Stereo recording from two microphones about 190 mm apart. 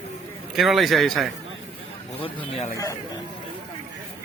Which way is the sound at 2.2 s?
30° left (ahead or behind).